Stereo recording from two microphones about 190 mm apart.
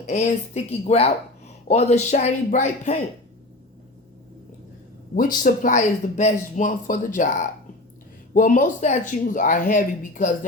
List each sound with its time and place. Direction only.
0.1 s speech: 35° left (ahead or behind)
5.1 s speech: 45° left (ahead or behind)